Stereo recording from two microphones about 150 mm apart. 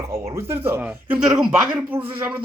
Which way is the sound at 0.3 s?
15° right (ahead or behind).